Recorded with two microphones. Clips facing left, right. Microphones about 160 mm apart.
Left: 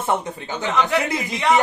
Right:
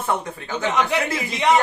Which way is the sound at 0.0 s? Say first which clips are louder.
Left 2 dB; 20° left (ahead or behind).